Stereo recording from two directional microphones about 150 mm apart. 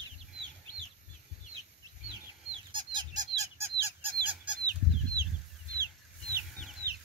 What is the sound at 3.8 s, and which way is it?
Bird, 10° right (ahead or behind).